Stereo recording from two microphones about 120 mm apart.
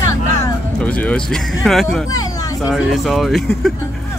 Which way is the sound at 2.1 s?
30° left (ahead or behind).